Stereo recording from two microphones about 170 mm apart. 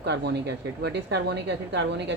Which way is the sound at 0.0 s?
80° right.